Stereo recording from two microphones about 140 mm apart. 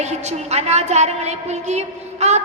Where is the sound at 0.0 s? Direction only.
55° right (ahead or behind).